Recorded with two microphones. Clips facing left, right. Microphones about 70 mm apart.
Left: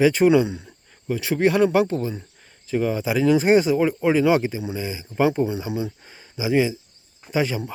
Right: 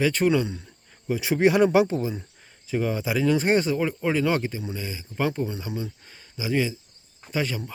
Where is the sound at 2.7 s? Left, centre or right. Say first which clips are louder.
Left 3 dB; centre.